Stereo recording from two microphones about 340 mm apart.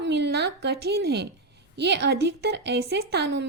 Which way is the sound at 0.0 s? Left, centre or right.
Right.